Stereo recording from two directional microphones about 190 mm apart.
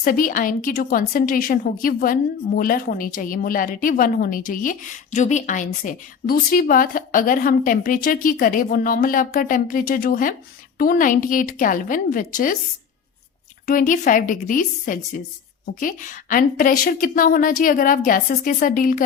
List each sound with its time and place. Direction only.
0.0 s a woman's voice: 45° left (ahead or behind)
13.7 s a woman's voice: 45° left (ahead or behind)